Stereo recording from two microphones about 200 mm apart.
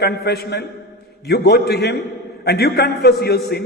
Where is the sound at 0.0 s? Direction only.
55° left (ahead or behind).